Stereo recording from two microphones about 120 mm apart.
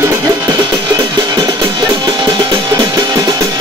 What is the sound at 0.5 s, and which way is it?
Music, 40° right (ahead or behind).